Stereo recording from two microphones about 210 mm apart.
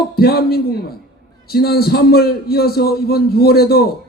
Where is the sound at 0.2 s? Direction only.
50° left (ahead or behind).